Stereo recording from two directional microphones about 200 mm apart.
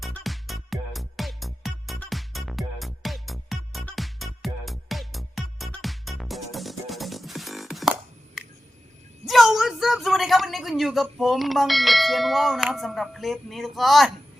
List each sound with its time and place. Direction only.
0.0 s music: centre (ahead or behind)
8.4 s a sound: centre (ahead or behind)
9.2 s a woman's voice: centre (ahead or behind)